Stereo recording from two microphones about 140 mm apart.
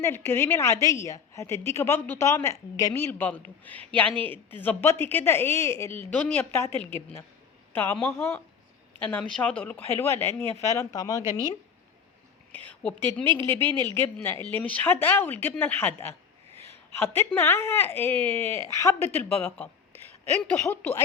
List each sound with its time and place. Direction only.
0.0 s a woman's voice: 15° left (ahead or behind)
12.5 s a sound: 15° left (ahead or behind)
13.1 s a woman's voice: 15° left (ahead or behind)